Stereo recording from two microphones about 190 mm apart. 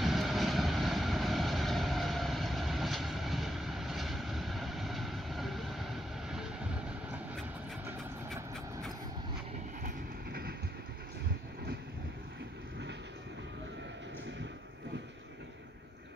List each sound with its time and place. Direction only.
0.0 s vehicle: centre (ahead or behind)
9.8 s train: 55° right (ahead or behind)